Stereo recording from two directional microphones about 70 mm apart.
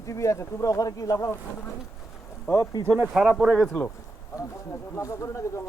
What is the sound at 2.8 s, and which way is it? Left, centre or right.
Speech, right.